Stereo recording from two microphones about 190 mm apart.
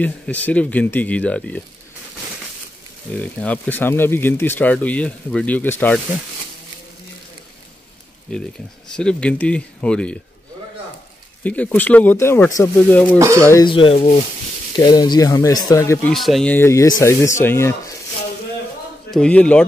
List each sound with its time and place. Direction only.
0.0 s speech: 10° left (ahead or behind)
3.2 s speech: 5° left (ahead or behind)
8.9 s speech: 5° left (ahead or behind)
11.4 s speech: 5° left (ahead or behind)
13.2 s speech: 15° right (ahead or behind)
13.5 s speech: 20° left (ahead or behind)
14.8 s speech: 20° left (ahead or behind)
16.1 s speech: centre (ahead or behind)
19.0 s speech: 5° left (ahead or behind)